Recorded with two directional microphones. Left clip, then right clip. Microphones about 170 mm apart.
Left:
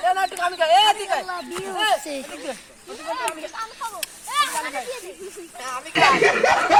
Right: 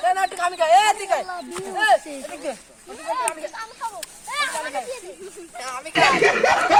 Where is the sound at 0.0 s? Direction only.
20° right (ahead or behind).